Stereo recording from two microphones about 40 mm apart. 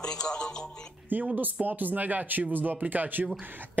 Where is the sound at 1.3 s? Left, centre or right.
Right.